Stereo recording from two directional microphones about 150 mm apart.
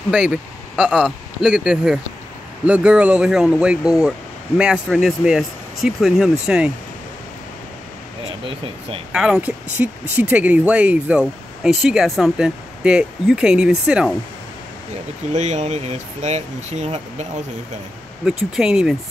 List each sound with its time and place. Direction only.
0.1 s speech: 5° right (ahead or behind)
9.1 s speech: 5° right (ahead or behind)
15.3 s speech: 50° right (ahead or behind)
18.6 s speech: 5° right (ahead or behind)